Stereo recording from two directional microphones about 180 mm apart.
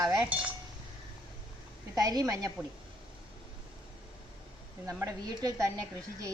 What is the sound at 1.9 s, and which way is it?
Speech, 20° right (ahead or behind).